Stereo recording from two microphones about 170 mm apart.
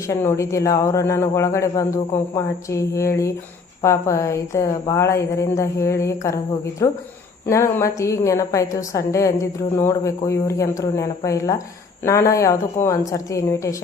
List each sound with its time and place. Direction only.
0.1 s a woman's voice: 15° left (ahead or behind)